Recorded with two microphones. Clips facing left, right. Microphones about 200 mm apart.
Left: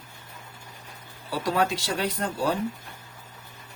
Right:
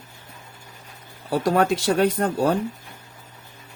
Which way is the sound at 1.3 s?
50° right (ahead or behind).